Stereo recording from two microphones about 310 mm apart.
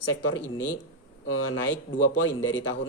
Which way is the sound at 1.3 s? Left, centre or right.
Left.